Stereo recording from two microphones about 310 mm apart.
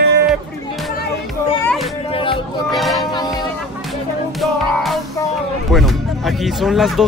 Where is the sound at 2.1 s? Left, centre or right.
Centre.